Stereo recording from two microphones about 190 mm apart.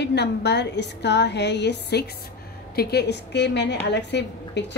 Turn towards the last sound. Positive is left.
turn(degrees=65)  # may be behind; listen again after turning